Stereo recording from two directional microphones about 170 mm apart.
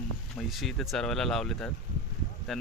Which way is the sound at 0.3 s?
Centre (ahead or behind).